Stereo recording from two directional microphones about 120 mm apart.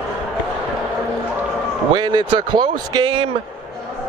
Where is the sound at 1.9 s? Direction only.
40° right (ahead or behind).